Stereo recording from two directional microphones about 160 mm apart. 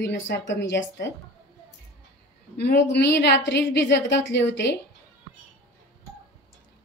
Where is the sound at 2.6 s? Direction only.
90° left.